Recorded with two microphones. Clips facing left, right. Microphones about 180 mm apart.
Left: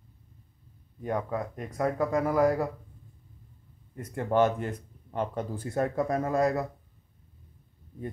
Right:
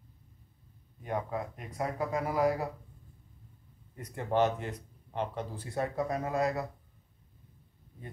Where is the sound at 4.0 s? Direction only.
50° left (ahead or behind).